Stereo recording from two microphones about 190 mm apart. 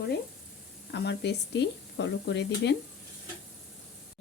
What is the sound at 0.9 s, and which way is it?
Speech, 65° left (ahead or behind).